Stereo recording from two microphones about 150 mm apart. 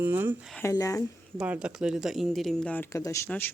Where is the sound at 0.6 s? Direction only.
20° left (ahead or behind).